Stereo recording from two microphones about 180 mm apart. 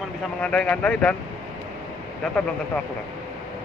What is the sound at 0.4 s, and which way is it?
Speech, 5° left (ahead or behind).